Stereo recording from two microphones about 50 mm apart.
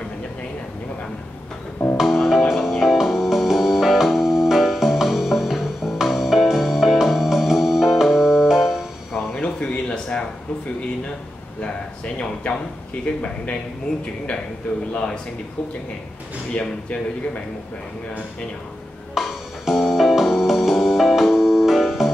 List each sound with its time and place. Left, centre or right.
2.0 s music: centre
9.3 s a sound: centre
12.2 s a sound: centre
13.9 s a man's voice: centre
16.5 s a man's voice: left
19.1 s music: centre